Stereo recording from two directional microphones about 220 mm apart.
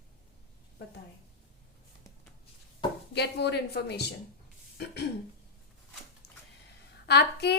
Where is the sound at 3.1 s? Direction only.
50° left (ahead or behind).